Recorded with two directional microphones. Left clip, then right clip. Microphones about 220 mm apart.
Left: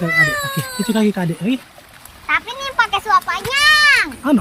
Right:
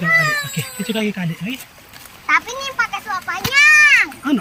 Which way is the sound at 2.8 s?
25° left (ahead or behind).